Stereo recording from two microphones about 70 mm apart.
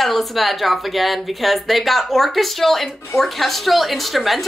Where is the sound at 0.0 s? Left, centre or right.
Centre.